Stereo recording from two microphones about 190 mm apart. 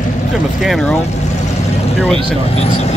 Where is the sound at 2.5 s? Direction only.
35° left (ahead or behind).